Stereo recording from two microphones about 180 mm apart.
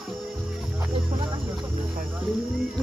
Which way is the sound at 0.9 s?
25° right (ahead or behind).